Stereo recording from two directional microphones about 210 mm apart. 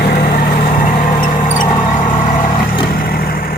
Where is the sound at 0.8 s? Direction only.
40° left (ahead or behind).